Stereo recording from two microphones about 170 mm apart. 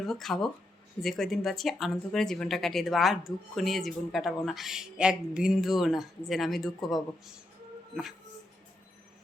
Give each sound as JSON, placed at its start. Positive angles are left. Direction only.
{"t": 0.0, "sound": "speech", "side_deg": 0}